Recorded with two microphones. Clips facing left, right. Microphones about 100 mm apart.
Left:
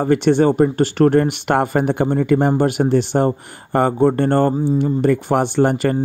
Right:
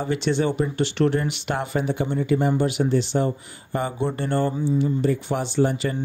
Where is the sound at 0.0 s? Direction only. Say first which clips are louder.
Left 8 dB; 50° left (ahead or behind).